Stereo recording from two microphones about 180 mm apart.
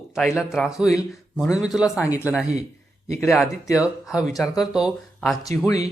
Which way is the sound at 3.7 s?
5° right (ahead or behind).